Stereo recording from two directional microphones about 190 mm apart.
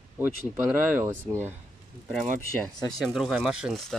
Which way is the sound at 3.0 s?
Centre (ahead or behind).